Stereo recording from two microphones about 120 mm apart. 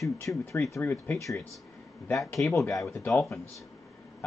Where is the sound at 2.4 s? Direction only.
25° left (ahead or behind).